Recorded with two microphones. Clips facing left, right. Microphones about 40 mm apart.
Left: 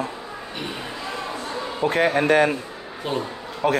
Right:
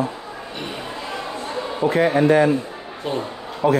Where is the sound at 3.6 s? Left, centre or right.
Left.